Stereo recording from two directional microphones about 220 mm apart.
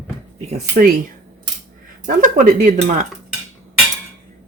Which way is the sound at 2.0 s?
35° right (ahead or behind).